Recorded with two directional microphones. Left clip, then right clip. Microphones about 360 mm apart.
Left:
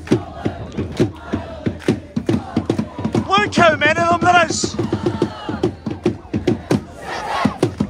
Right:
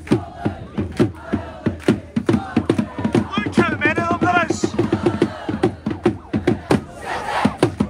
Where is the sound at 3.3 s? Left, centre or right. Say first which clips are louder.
Left 7 dB; centre.